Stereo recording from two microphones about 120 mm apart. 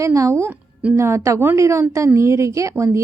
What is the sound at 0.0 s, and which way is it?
A woman's voice, 25° right (ahead or behind).